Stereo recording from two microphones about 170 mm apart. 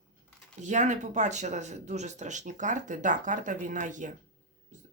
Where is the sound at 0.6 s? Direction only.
45° right (ahead or behind).